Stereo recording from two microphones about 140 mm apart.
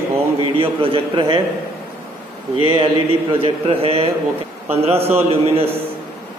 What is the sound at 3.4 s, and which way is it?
A man's voice, 45° right (ahead or behind).